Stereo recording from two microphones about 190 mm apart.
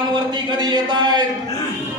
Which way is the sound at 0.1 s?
20° right (ahead or behind).